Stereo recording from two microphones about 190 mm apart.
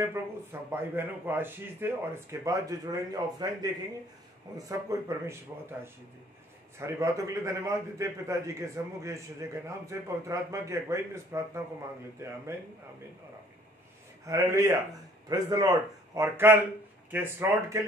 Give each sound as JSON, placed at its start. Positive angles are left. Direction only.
{"t": 0.0, "sound": "a man's voice", "side_deg": -15}
{"t": 4.6, "sound": "a man's voice", "side_deg": -15}
{"t": 6.8, "sound": "a man's voice", "side_deg": -15}
{"t": 14.2, "sound": "a man's voice", "side_deg": -15}